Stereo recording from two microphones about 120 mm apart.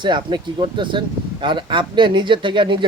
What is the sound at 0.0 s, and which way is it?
Speech, 40° right (ahead or behind).